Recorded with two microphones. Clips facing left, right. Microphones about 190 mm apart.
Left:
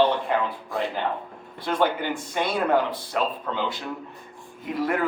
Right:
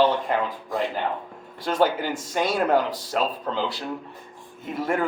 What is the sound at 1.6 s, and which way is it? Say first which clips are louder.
Speech: right 2 dB; 40° right (ahead or behind).